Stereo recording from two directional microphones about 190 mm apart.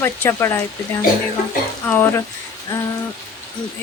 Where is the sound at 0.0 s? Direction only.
10° left (ahead or behind).